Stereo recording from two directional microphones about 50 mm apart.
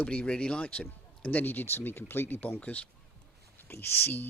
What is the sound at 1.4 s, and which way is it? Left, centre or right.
Speech, left.